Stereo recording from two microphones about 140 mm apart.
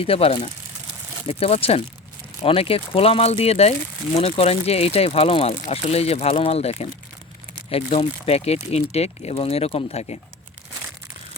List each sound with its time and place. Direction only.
0.0 s speech: 45° left (ahead or behind)